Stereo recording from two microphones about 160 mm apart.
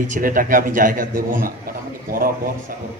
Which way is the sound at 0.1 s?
60° right (ahead or behind).